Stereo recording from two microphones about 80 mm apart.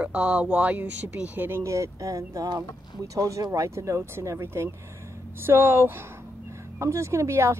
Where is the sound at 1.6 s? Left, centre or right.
Right.